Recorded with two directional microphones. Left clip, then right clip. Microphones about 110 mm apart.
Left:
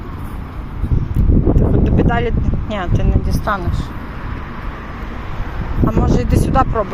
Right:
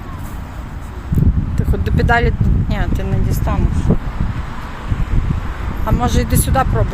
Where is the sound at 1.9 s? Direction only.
35° right (ahead or behind).